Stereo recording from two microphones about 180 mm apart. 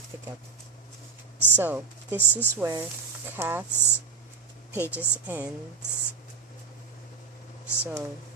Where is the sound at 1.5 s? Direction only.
10° right (ahead or behind).